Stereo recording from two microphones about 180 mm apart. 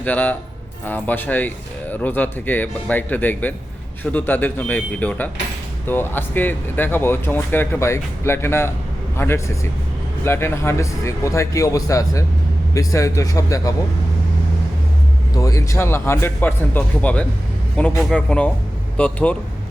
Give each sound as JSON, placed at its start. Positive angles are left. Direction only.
{"t": 0.0, "sound": "a man's voice", "side_deg": 10}
{"t": 15.4, "sound": "speech", "side_deg": 15}